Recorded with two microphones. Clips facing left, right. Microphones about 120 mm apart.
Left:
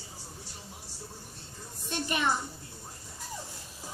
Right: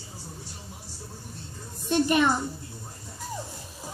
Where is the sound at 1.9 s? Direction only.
55° right (ahead or behind).